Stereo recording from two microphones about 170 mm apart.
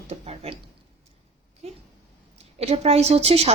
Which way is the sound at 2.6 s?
35° right (ahead or behind).